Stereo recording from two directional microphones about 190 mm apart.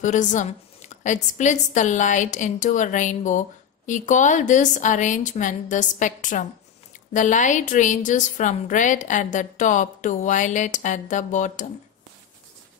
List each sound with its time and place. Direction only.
0.0 s a woman's voice: 40° left (ahead or behind)